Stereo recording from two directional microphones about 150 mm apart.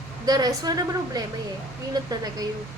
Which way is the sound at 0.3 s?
25° right (ahead or behind).